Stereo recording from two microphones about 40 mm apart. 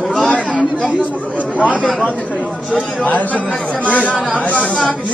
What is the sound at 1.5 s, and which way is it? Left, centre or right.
Speech, left.